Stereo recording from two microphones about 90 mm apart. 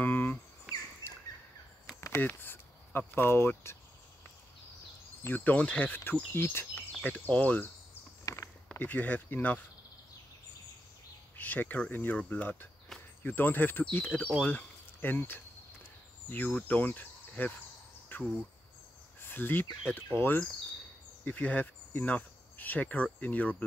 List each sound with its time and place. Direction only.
0.0 s cricket: 20° left (ahead or behind)
0.7 s rodents: 5° right (ahead or behind)
2.0 s a sound: 30° left (ahead or behind)
2.2 s speech: 25° left (ahead or behind)
5.2 s insect: 20° left (ahead or behind)
7.0 s speech: 15° left (ahead or behind)
8.3 s a sound: 40° left (ahead or behind)
8.6 s speech: 20° left (ahead or behind)
11.3 s insect: 20° left (ahead or behind)
14.4 s a sound: 20° left (ahead or behind)
18.1 s insect: 20° left (ahead or behind)
19.2 s speech: 20° left (ahead or behind)
20.2 s insect: 25° left (ahead or behind)
21.2 s speech: 20° left (ahead or behind)